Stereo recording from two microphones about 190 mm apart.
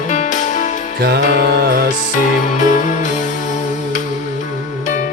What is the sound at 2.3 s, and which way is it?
Music, 40° left (ahead or behind).